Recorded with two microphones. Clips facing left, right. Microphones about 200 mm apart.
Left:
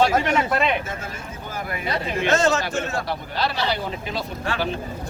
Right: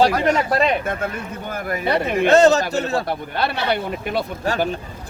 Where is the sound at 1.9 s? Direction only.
60° right (ahead or behind).